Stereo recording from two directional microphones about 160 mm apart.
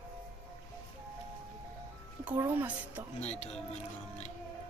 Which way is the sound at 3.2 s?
45° left (ahead or behind).